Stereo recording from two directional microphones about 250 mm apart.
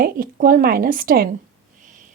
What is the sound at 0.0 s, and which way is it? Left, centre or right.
Speech, right.